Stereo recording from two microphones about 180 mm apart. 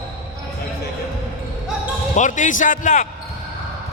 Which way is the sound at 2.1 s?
45° left (ahead or behind).